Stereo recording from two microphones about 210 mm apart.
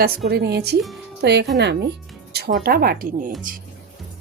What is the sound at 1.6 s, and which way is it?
Music, 50° right (ahead or behind).